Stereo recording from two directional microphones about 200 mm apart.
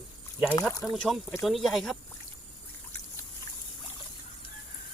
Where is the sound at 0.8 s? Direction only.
Centre (ahead or behind).